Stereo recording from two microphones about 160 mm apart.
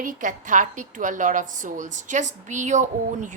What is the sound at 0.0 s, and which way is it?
A woman's voice, 55° right (ahead or behind).